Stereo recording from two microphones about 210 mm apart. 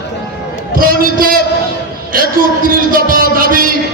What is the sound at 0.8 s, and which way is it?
Speech, 45° right (ahead or behind).